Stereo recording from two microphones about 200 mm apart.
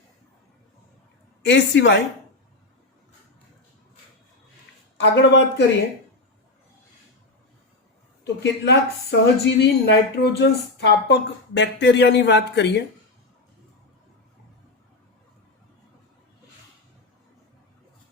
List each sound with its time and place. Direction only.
1.5 s a woman's voice: 60° left (ahead or behind)
4.9 s a woman's voice: 60° left (ahead or behind)
8.2 s a woman's voice: 55° left (ahead or behind)